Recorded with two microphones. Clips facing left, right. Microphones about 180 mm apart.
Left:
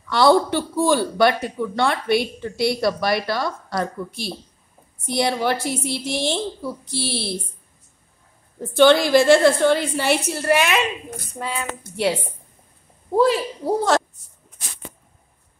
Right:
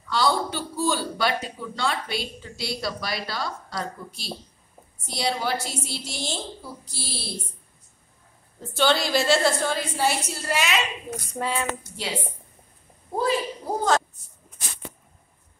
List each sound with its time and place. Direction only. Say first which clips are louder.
0.1 s a man's voice: left 8 dB; 60° left (ahead or behind)
8.7 s a man's voice: left 9 dB; 55° left (ahead or behind)
11.3 s a sound: right 1 dB; centre (ahead or behind)
13.1 s a woman's voice: left 7 dB; 85° left